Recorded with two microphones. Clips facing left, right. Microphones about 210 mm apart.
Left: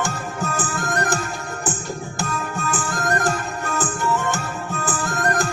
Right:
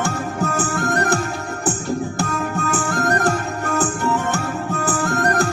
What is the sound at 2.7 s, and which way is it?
Music, 65° right (ahead or behind).